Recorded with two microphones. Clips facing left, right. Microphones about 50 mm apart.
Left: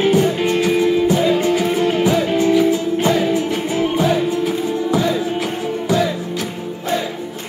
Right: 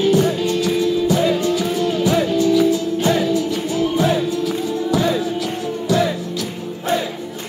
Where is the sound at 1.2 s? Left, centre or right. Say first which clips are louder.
Left 2 dB; left.